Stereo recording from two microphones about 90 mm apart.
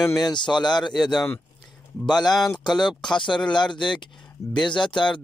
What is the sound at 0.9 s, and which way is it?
Speech, 5° left (ahead or behind).